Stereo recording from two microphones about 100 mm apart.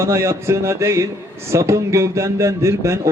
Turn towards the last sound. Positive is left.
turn(degrees=-30)  # may be behind; listen again after turning